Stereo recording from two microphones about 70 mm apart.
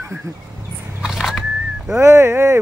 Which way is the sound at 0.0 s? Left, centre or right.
Right.